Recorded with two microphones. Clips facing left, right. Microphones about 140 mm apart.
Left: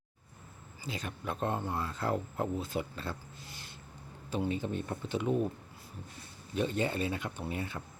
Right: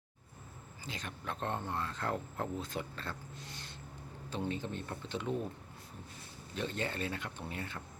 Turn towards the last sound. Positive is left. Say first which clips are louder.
# left 5 dB
turn(degrees=15)  # may be behind; listen again after turning